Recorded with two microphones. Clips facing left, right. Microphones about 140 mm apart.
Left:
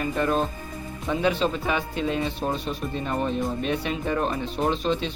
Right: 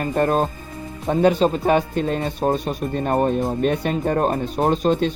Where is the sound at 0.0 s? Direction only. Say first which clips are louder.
Right 5 dB; 45° right (ahead or behind).